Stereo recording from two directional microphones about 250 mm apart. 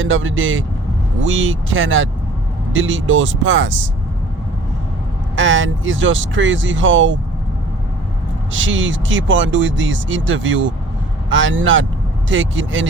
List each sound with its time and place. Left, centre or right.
0.0 s speech: right
5.4 s speech: right
8.5 s a man's voice: right